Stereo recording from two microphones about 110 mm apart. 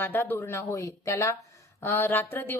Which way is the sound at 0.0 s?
20° left (ahead or behind).